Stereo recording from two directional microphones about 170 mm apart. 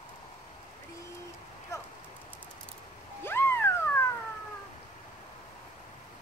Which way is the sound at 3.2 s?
15° left (ahead or behind).